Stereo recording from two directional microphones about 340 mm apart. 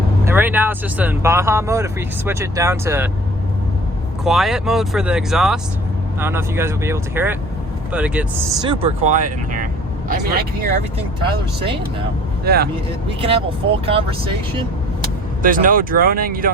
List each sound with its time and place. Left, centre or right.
0.3 s speech: centre
4.2 s speech: centre
8.6 s speech: centre
12.5 s speech: right
13.8 s speech: centre
15.4 s speech: right